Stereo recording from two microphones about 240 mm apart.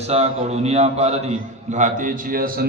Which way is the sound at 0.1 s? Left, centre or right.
Right.